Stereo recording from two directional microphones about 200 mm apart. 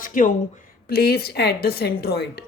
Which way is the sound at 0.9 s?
50° left (ahead or behind).